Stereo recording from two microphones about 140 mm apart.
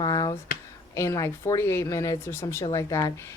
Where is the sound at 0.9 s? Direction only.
20° left (ahead or behind).